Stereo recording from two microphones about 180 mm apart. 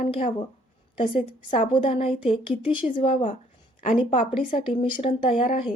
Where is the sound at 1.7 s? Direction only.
30° left (ahead or behind).